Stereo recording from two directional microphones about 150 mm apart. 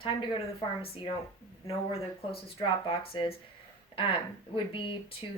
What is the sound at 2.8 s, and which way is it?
Speech, 35° left (ahead or behind).